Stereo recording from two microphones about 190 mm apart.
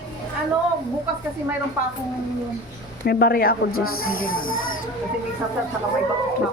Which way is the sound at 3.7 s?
90° left.